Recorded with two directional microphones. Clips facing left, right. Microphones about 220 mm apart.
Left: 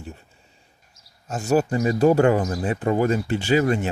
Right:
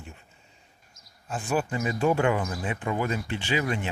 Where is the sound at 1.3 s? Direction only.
40° left (ahead or behind).